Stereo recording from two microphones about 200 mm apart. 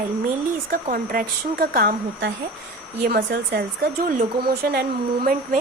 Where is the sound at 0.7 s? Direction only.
45° right (ahead or behind).